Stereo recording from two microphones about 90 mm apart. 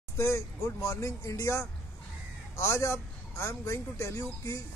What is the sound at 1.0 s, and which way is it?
A man's voice, 35° left (ahead or behind).